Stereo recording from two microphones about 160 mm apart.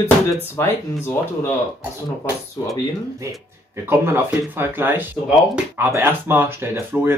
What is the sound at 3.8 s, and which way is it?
Speech, 15° right (ahead or behind).